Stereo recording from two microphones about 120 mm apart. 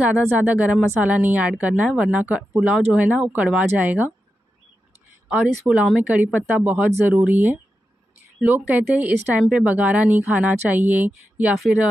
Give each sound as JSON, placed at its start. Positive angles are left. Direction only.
{"t": 0.1, "sound": "speech", "side_deg": -10}
{"t": 5.3, "sound": "speech", "side_deg": -5}